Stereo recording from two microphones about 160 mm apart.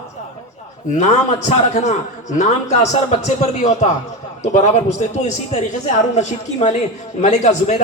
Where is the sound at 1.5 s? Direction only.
45° left (ahead or behind).